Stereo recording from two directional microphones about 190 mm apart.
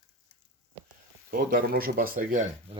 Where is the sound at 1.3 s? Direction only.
50° right (ahead or behind).